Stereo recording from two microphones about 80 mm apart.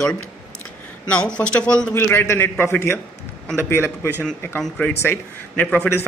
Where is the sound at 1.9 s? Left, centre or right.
Left.